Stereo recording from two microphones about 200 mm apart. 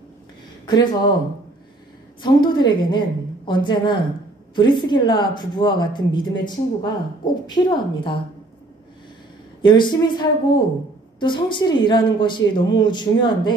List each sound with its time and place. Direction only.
0.7 s speech: 20° left (ahead or behind)
2.2 s speech: 20° left (ahead or behind)
9.6 s speech: 25° left (ahead or behind)